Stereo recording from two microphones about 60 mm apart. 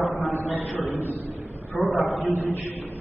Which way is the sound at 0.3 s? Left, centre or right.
Left.